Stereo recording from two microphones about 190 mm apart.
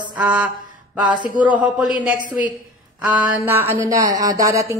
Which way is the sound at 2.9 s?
5° right (ahead or behind).